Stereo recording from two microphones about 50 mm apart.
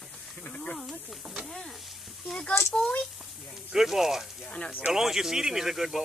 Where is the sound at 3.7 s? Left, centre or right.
Centre.